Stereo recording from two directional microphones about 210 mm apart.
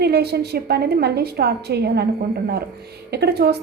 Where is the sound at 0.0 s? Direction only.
50° right (ahead or behind).